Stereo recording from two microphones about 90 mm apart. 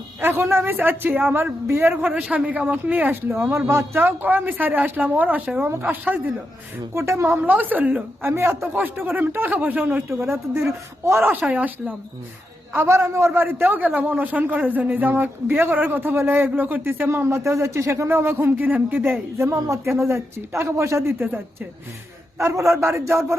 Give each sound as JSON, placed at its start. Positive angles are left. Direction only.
{"t": 0.2, "sound": "speech", "side_deg": -25}
{"t": 6.9, "sound": "a man's voice", "side_deg": -30}
{"t": 7.3, "sound": "speech", "side_deg": -20}
{"t": 11.3, "sound": "speech", "side_deg": -15}
{"t": 19.5, "sound": "a man's voice", "side_deg": -35}
{"t": 22.4, "sound": "a man's voice", "side_deg": -35}